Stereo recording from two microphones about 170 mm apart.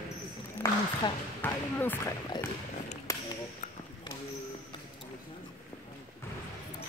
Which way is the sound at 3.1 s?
20° left (ahead or behind).